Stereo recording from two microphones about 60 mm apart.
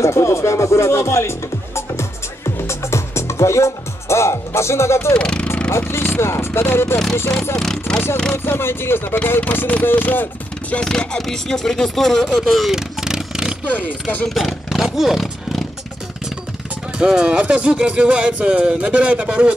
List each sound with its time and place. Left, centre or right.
0.0 s speech: left
1.8 s music: left
5.1 s speech: centre
5.7 s speech: left
7.5 s speech: centre
8.5 s speech: left
10.7 s speech: centre
13.7 s speech: left
14.3 s roar: centre
17.0 s speech: centre